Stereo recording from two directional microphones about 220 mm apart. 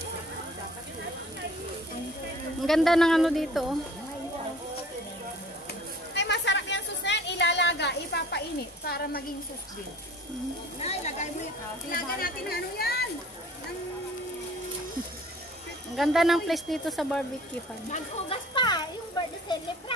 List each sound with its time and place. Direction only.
2.6 s speech: centre (ahead or behind)
6.1 s a sound: 55° left (ahead or behind)
10.8 s speech: 30° left (ahead or behind)
11.9 s speech: 45° left (ahead or behind)
16.0 s speech: centre (ahead or behind)
17.9 s children playing: 25° left (ahead or behind)